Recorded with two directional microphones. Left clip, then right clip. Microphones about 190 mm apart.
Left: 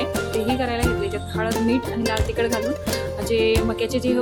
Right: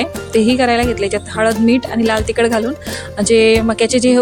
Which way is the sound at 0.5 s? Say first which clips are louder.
Right 9 dB; 40° right (ahead or behind).